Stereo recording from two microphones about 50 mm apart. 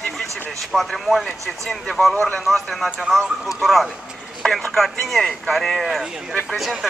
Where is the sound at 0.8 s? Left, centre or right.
Centre.